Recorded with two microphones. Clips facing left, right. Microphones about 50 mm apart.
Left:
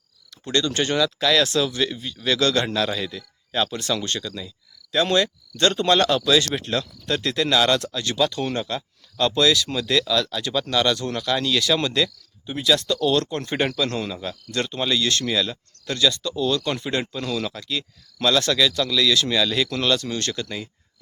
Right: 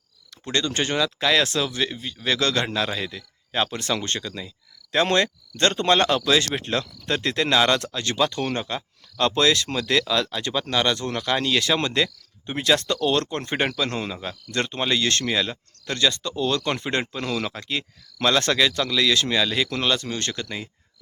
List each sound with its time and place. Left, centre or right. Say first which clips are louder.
0.4 s speech: left 2 dB; right
3.2 s speech: left 1 dB; right
14.5 s speech: even; right